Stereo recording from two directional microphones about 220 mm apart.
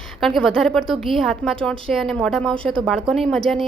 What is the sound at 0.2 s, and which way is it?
A woman's voice, centre (ahead or behind).